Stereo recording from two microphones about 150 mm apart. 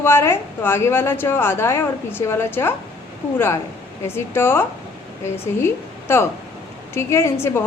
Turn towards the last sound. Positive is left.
turn(degrees=15)  # may be behind; listen again after turning